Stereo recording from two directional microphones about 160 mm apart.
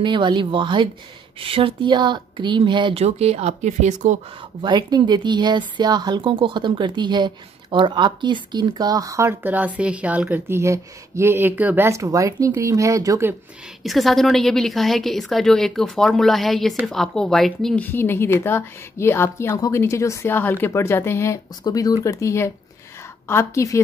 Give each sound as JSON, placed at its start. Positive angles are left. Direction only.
{"t": 0.0, "sound": "speech", "side_deg": -30}
{"t": 4.6, "sound": "speech", "side_deg": -30}
{"t": 13.8, "sound": "a woman's voice", "side_deg": 0}